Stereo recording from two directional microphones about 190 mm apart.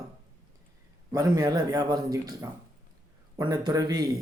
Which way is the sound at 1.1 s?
20° right (ahead or behind).